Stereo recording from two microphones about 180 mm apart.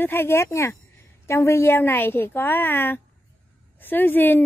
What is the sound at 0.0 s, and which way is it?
A woman's voice, 15° left (ahead or behind).